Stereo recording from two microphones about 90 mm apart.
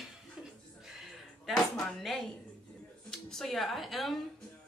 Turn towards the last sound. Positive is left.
turn(degrees=0)  # may be behind; listen again after turning